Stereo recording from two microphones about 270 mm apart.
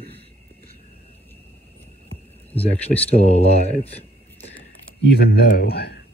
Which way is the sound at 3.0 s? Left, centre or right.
Left.